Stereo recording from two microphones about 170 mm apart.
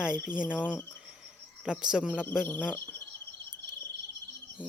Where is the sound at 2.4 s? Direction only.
10° left (ahead or behind).